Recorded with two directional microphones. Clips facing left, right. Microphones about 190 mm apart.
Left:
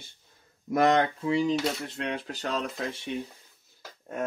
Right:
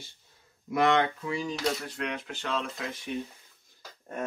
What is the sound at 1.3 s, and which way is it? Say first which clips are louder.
Speech: left 5 dB; 25° left (ahead or behind).